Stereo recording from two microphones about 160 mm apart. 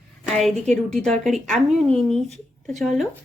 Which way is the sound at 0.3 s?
5° left (ahead or behind).